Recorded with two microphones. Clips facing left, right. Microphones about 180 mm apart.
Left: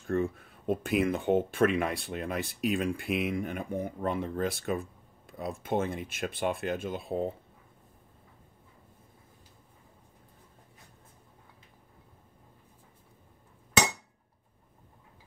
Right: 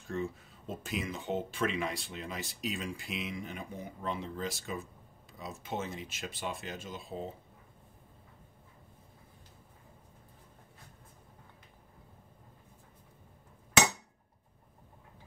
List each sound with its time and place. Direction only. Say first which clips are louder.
0.0 s speech: left 7 dB; 55° left (ahead or behind)